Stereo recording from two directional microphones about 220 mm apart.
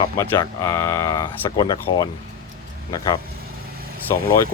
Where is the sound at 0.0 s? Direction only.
15° left (ahead or behind).